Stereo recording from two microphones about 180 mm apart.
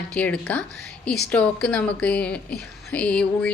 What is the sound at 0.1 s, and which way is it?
A woman's voice, 5° left (ahead or behind).